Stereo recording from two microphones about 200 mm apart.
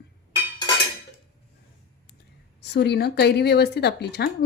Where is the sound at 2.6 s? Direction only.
55° left (ahead or behind).